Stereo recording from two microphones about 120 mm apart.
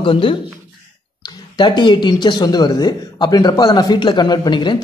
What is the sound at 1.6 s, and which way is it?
Speech, 40° left (ahead or behind).